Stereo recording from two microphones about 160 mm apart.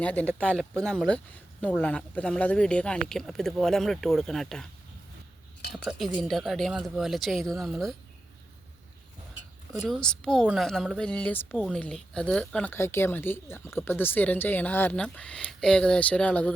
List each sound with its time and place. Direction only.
0.0 s speech: 10° left (ahead or behind)
5.8 s speech: centre (ahead or behind)
9.7 s speech: centre (ahead or behind)